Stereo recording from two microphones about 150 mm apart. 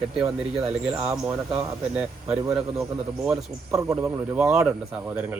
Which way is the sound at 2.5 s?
5° right (ahead or behind).